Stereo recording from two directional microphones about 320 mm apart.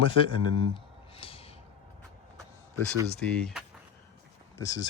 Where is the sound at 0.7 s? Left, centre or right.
Centre.